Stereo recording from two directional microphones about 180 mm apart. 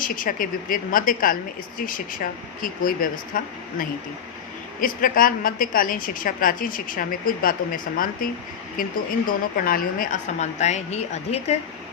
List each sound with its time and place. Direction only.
0.0 s a woman's voice: 50° left (ahead or behind)